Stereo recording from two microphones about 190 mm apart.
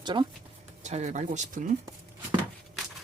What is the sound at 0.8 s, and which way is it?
Speech, 35° right (ahead or behind).